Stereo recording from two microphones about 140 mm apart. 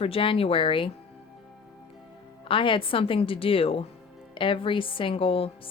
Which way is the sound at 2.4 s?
40° left (ahead or behind).